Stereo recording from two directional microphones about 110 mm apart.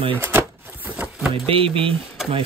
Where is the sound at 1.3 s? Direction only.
60° right (ahead or behind).